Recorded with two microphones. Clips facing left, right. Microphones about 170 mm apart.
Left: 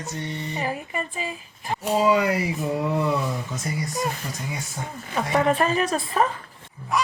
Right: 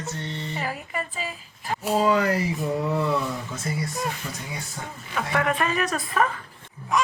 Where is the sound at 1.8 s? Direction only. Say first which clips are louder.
Left 1 dB; centre (ahead or behind).